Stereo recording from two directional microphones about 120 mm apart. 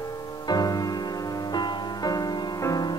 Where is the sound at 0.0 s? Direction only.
30° left (ahead or behind).